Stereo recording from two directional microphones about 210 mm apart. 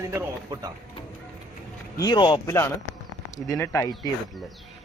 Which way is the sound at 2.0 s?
20° left (ahead or behind).